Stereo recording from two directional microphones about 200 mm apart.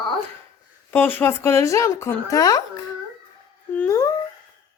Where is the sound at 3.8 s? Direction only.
15° left (ahead or behind).